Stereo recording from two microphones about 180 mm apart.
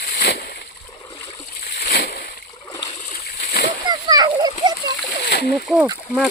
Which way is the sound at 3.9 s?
20° right (ahead or behind).